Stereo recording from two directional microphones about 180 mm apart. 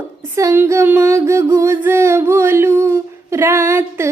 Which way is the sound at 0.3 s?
15° right (ahead or behind).